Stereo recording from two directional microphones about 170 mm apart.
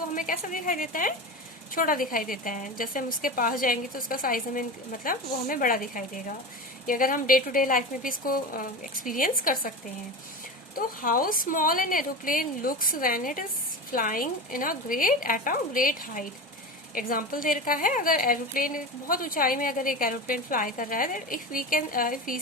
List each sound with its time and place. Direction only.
0.1 s a woman's voice: 50° left (ahead or behind)
10.8 s a woman's voice: 55° left (ahead or behind)